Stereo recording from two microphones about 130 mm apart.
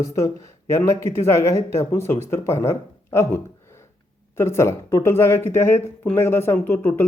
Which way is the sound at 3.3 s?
20° left (ahead or behind).